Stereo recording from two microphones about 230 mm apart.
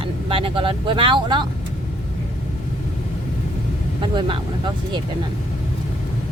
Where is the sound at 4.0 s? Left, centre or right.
Right.